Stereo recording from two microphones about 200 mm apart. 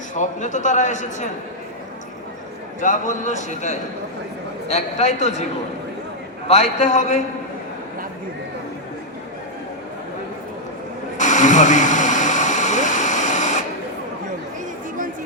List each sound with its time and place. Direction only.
0.1 s a man's voice: 40° left (ahead or behind)
2.8 s a man's voice: 40° left (ahead or behind)
6.5 s a man's voice: 35° left (ahead or behind)
11.2 s a sound: 40° left (ahead or behind)